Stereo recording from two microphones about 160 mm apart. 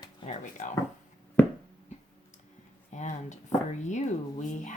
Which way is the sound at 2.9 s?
50° left (ahead or behind).